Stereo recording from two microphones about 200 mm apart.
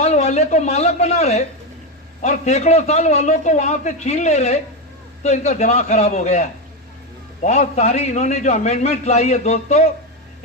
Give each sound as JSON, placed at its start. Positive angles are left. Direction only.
{"t": 0.0, "sound": "a man's voice", "side_deg": 35}